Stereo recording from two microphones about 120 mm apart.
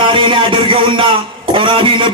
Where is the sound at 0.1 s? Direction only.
45° right (ahead or behind).